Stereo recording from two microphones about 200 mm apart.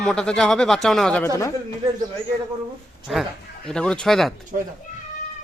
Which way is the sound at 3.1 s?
Centre (ahead or behind).